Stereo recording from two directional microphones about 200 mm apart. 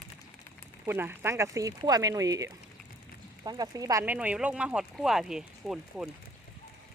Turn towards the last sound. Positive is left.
turn(degrees=-5)  # may be behind; listen again after turning